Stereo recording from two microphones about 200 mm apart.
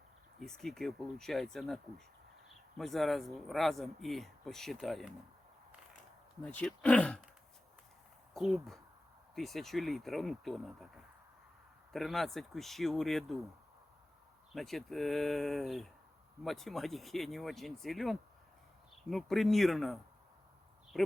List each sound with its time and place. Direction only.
0.3 s speech: centre (ahead or behind)
6.4 s speech: 5° left (ahead or behind)
8.3 s speech: centre (ahead or behind)
11.9 s speech: centre (ahead or behind)
14.5 s speech: centre (ahead or behind)